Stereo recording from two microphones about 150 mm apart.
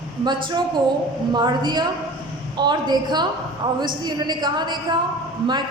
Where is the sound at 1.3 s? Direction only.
30° right (ahead or behind).